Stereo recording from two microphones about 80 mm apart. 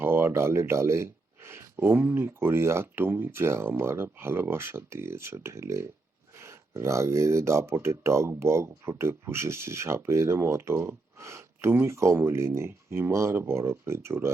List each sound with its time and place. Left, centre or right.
0.0 s speech: right